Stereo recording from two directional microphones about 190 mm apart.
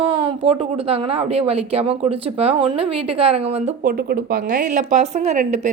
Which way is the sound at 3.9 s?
50° right (ahead or behind).